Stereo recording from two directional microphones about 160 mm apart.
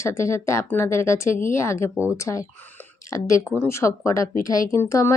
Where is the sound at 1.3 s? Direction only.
55° left (ahead or behind).